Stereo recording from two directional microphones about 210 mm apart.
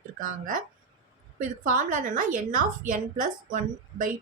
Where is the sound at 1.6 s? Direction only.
40° right (ahead or behind).